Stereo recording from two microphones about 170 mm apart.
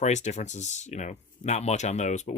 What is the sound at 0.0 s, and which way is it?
Speech, 45° left (ahead or behind).